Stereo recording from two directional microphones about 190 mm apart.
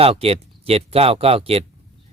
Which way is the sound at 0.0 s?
30° right (ahead or behind).